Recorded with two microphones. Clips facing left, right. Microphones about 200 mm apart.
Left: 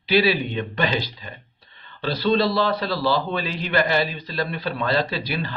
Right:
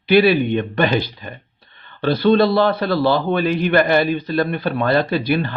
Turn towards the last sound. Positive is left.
turn(degrees=-55)  # may be behind; listen again after turning